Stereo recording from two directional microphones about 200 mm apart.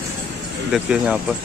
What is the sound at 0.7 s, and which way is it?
Speech, 5° right (ahead or behind).